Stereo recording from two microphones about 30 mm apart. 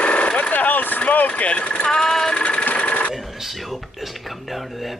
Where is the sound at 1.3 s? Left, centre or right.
Left.